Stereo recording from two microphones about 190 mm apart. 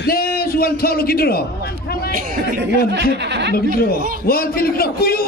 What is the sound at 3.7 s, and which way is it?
A man's voice, 55° left (ahead or behind).